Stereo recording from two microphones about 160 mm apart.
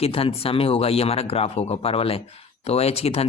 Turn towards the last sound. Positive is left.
turn(degrees=40)  # may be behind; listen again after turning